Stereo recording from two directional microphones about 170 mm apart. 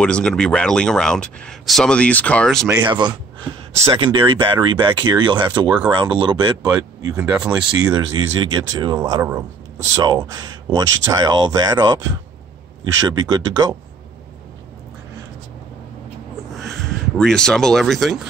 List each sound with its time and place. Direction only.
0.0 s speech: 5° left (ahead or behind)
2.9 s speech: 25° right (ahead or behind)
7.3 s speech: 5° right (ahead or behind)
7.8 s speech: 25° right (ahead or behind)
17.2 s speech: 5° left (ahead or behind)